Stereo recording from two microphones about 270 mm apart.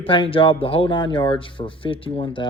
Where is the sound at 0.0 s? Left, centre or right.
Centre.